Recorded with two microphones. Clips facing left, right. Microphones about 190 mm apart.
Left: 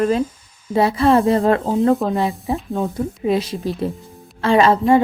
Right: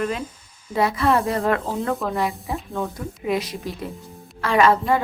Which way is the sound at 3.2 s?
30° left (ahead or behind).